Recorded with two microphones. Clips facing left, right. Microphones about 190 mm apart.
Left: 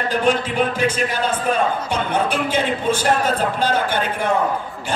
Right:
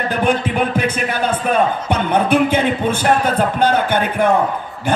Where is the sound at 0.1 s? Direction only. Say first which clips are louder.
Right 1 dB; 60° right (ahead or behind).